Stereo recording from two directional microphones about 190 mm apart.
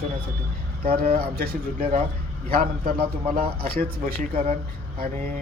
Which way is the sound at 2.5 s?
50° right (ahead or behind).